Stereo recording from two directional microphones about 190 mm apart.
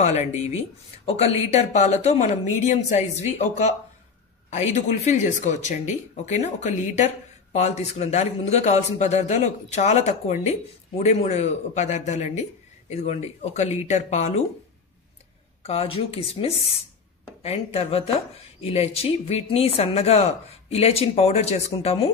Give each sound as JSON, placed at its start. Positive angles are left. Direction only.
{"t": 0.0, "sound": "a man's voice", "side_deg": 35}
{"t": 5.1, "sound": "a man's voice", "side_deg": 40}
{"t": 15.6, "sound": "a man's voice", "side_deg": 30}